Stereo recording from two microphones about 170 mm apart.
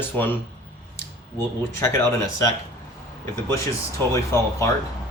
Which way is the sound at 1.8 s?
15° left (ahead or behind).